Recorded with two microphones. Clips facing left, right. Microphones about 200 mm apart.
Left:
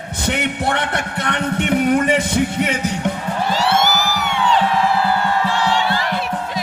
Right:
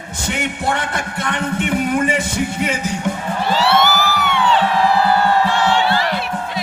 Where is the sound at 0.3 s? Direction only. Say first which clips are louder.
Left 1 dB; 60° left (ahead or behind).